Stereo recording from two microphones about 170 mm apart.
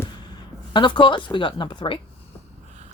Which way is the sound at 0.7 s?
30° left (ahead or behind).